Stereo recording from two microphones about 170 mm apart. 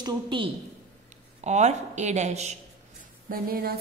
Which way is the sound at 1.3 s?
40° right (ahead or behind).